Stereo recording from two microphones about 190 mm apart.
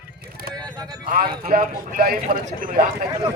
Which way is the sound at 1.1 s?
45° right (ahead or behind).